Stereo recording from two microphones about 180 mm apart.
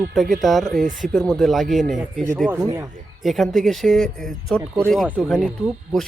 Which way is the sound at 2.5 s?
15° right (ahead or behind).